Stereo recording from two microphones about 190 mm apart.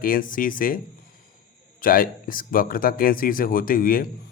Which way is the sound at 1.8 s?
50° left (ahead or behind).